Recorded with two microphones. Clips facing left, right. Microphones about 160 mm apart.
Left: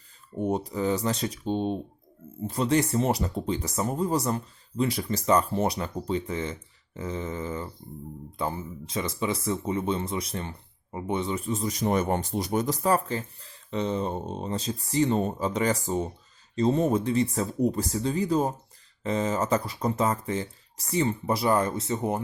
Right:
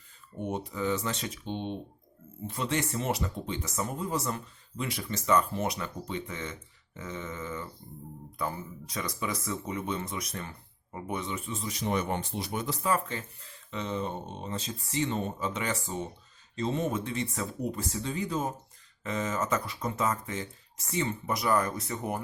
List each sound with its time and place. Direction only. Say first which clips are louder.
0.4 s speech: left 5 dB; 35° left (ahead or behind)